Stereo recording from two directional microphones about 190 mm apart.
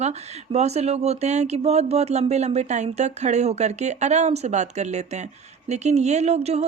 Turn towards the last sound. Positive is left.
turn(degrees=-35)  # may be behind; listen again after turning